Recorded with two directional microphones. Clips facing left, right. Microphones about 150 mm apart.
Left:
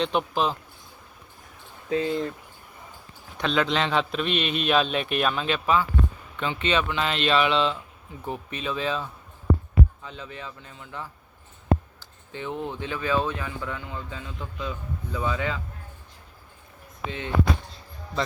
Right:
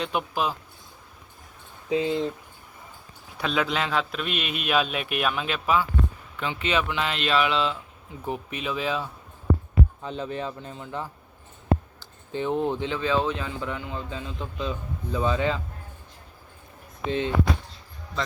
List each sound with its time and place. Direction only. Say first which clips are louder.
0.0 s speech: left 3 dB; 5° right (ahead or behind)
1.9 s speech: right 1 dB; 15° right (ahead or behind)
3.3 s a man's voice: left 2 dB; 5° right (ahead or behind)
10.0 s speech: right 8 dB; 30° right (ahead or behind)
17.1 s speech: right 8 dB; 25° right (ahead or behind)